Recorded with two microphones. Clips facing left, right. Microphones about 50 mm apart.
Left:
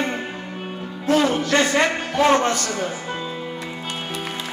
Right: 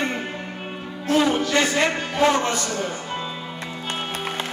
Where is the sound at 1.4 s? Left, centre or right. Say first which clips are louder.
Left 2 dB; left.